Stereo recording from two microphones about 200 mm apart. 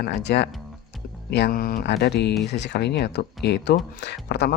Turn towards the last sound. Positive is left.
turn(degrees=55)  # may be behind; listen again after turning